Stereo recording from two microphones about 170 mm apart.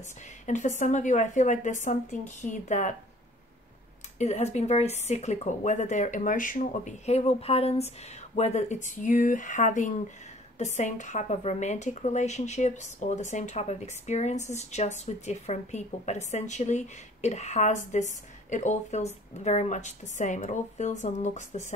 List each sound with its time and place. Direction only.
0.5 s a woman's voice: 45° left (ahead or behind)
4.2 s a woman's voice: 40° left (ahead or behind)